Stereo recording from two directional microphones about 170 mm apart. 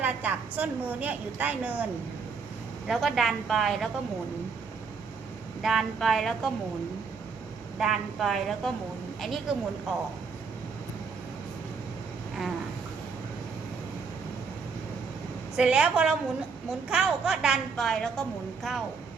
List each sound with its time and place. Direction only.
0.0 s a woman's voice: 10° right (ahead or behind)
5.6 s a woman's voice: centre (ahead or behind)
7.8 s a woman's voice: centre (ahead or behind)
15.5 s a woman's voice: 5° right (ahead or behind)